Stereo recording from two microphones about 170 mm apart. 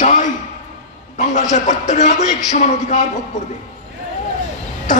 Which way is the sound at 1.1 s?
45° left (ahead or behind).